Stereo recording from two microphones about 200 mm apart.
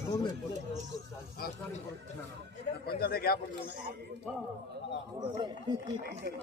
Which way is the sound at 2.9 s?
50° left (ahead or behind).